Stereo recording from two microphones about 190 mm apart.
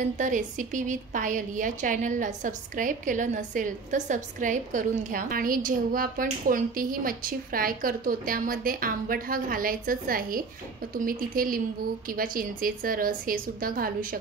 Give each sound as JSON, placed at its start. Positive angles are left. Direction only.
{"t": 0.2, "sound": "a woman's voice", "side_deg": -40}